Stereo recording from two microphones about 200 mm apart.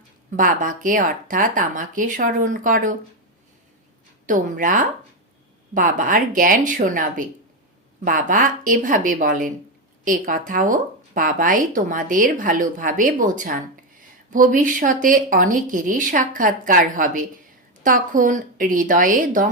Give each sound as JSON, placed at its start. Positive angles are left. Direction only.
{"t": 0.3, "sound": "speech", "side_deg": -40}
{"t": 4.3, "sound": "speech", "side_deg": -40}